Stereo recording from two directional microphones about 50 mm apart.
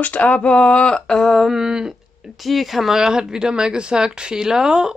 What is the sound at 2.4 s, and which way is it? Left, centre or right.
Speech, centre.